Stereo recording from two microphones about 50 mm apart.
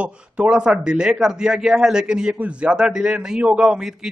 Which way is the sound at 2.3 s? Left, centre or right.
Right.